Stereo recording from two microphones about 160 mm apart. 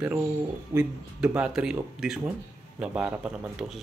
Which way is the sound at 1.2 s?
5° right (ahead or behind).